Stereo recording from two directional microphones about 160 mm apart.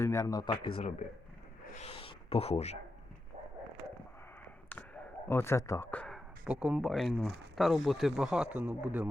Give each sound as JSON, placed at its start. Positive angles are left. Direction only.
{"t": 0.0, "sound": "speech", "side_deg": 20}
{"t": 1.7, "sound": "a sound", "side_deg": 40}
{"t": 4.7, "sound": "basketball bounce", "side_deg": 10}
{"t": 5.3, "sound": "speech", "side_deg": 15}